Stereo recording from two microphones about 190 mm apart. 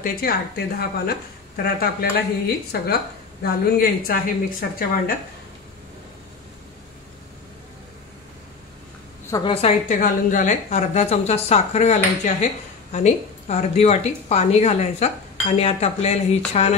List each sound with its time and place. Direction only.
0.0 s a woman's voice: 50° left (ahead or behind)
9.3 s a woman's voice: 25° left (ahead or behind)